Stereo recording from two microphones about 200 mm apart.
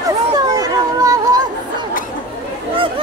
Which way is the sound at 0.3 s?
20° right (ahead or behind).